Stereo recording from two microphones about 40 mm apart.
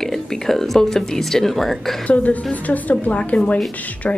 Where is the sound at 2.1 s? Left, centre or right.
Left.